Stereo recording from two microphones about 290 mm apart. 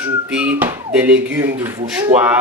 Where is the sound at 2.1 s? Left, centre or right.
Right.